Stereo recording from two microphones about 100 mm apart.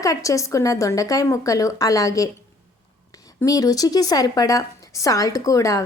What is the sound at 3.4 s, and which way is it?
Speech, 35° left (ahead or behind).